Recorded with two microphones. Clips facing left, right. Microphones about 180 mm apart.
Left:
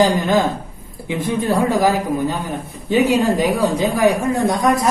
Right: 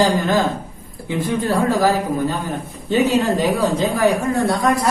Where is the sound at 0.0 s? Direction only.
20° left (ahead or behind).